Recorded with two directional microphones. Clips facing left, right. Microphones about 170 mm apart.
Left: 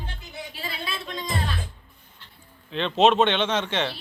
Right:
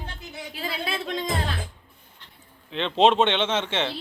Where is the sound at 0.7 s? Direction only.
90° right.